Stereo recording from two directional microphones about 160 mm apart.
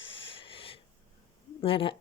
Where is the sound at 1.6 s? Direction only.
35° left (ahead or behind).